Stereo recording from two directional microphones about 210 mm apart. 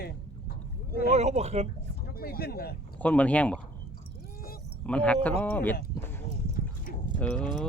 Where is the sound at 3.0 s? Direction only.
5° left (ahead or behind).